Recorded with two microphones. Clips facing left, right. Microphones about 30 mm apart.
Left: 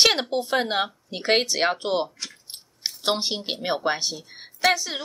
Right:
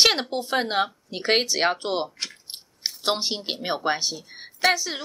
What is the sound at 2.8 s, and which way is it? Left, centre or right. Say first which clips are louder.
Speech: even; centre.